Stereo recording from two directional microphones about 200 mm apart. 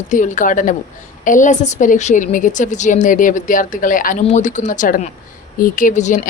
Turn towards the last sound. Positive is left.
turn(degrees=40)  # may be behind; listen again after turning